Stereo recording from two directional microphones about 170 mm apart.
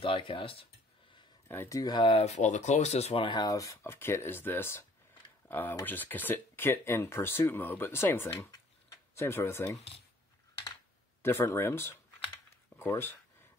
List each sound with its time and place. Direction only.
0.0 s speech: 30° left (ahead or behind)
1.5 s speech: 15° left (ahead or behind)
11.2 s speech: 15° left (ahead or behind)
12.7 s a sound: 15° left (ahead or behind)